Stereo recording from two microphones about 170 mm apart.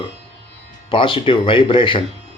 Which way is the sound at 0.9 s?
30° left (ahead or behind).